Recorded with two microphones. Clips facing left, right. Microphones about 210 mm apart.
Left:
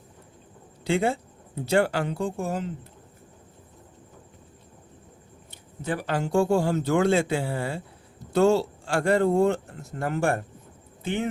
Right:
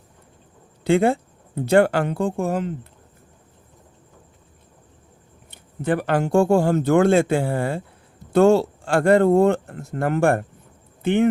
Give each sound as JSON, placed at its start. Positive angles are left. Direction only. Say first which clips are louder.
{"t": 0.9, "sound": "speech", "louder": "right 7 dB", "side_deg": -55}
{"t": 5.5, "sound": "speech", "louder": "right 8 dB", "side_deg": -60}